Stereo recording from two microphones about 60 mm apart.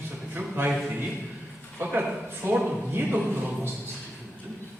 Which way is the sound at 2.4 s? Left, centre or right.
Right.